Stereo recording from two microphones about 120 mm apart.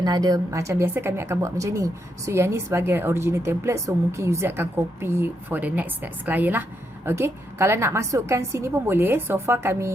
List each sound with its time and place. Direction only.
0.0 s a woman's voice: 35° right (ahead or behind)